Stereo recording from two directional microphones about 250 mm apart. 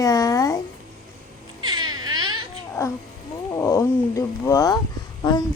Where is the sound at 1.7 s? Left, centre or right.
Right.